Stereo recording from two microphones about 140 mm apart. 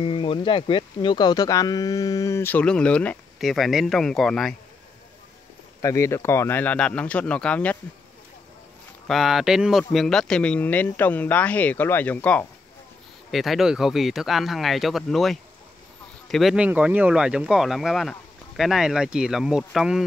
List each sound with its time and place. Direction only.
0.0 s speech: 35° left (ahead or behind); by 4.6 s centre (ahead or behind)
5.8 s speech: 20° left (ahead or behind)
9.0 s speech: centre (ahead or behind)
13.3 s speech: centre (ahead or behind)